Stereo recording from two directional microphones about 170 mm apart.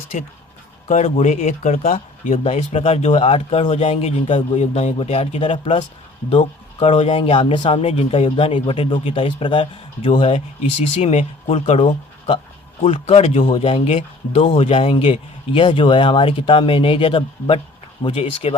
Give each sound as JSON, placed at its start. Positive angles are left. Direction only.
{"t": 0.1, "sound": "speech", "side_deg": 45}